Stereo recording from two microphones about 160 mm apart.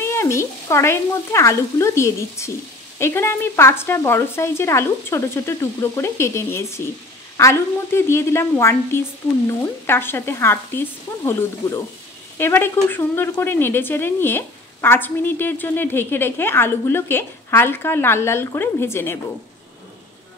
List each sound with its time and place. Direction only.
0.0 s a woman's voice: 15° left (ahead or behind)